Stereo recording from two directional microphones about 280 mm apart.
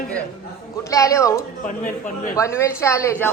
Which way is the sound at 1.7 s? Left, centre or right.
Left.